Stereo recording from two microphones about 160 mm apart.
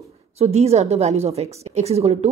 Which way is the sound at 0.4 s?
40° right (ahead or behind).